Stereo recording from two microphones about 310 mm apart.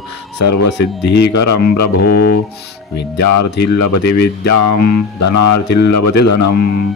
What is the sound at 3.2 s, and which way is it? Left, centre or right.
Speech, left.